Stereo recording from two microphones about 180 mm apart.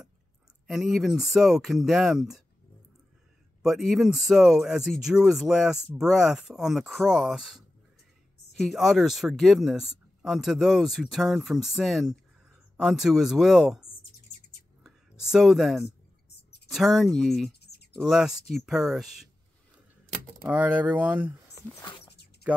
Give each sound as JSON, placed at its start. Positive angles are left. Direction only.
{"t": 0.7, "sound": "speech", "side_deg": 0}
{"t": 3.6, "sound": "speech", "side_deg": 0}
{"t": 14.8, "sound": "a sound", "side_deg": 0}
{"t": 16.6, "sound": "speech", "side_deg": 0}
{"t": 17.5, "sound": "a sound", "side_deg": 65}
{"t": 18.0, "sound": "speech", "side_deg": 0}
{"t": 20.4, "sound": "speech", "side_deg": -10}